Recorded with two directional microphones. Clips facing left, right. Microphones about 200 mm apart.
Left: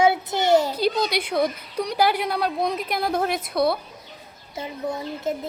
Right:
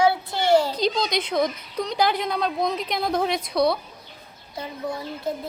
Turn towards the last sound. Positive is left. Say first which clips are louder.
# left 2 dB
turn(degrees=25)  # may be behind; listen again after turning